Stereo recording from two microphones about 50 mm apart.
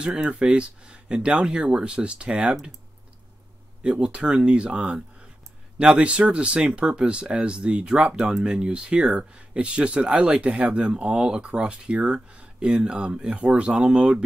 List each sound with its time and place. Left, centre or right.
0.0 s speech: centre
3.8 s speech: centre